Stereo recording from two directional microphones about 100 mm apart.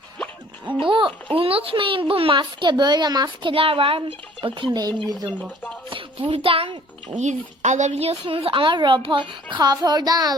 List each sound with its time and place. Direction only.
0.8 s a child's voice: 55° right (ahead or behind)
5.9 s a child's voice: 60° right (ahead or behind)
7.9 s a child's voice: 80° right; by 10.3 s 40° right (ahead or behind)